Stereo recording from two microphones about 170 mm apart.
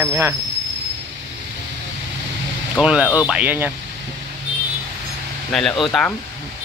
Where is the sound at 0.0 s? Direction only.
10° right (ahead or behind).